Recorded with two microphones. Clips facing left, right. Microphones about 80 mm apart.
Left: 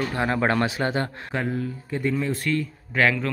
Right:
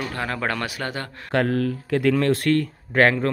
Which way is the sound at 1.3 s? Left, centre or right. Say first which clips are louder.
Right 6 dB; right.